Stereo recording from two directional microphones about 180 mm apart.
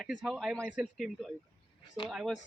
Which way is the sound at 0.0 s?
Centre (ahead or behind).